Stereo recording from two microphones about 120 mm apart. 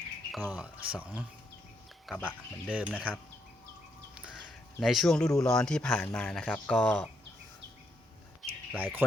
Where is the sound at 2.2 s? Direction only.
15° left (ahead or behind).